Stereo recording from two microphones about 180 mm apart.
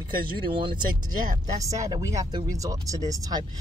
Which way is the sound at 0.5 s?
30° right (ahead or behind).